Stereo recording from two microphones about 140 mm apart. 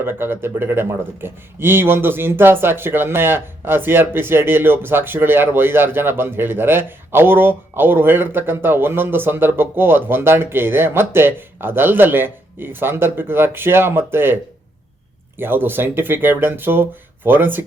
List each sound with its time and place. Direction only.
0.0 s speech: 15° right (ahead or behind)
15.4 s speech: 15° right (ahead or behind)